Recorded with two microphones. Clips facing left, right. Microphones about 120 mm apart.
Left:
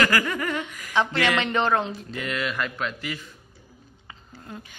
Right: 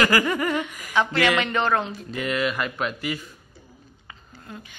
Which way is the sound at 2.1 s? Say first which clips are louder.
Right 5 dB; 10° right (ahead or behind).